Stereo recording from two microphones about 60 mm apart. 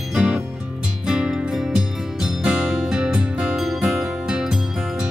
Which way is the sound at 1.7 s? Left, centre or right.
Centre.